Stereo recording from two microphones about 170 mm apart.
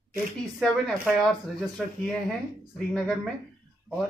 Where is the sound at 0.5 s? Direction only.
5° left (ahead or behind).